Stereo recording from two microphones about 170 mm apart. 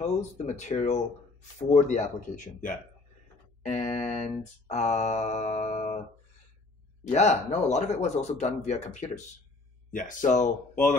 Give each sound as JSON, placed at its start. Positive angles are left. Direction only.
{"t": 0.0, "sound": "speech", "side_deg": 45}
{"t": 3.7, "sound": "mantra", "side_deg": 40}
{"t": 7.1, "sound": "mantra", "side_deg": 40}
{"t": 9.8, "sound": "speech", "side_deg": 50}